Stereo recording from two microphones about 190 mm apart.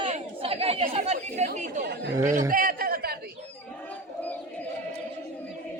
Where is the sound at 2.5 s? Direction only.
50° right (ahead or behind).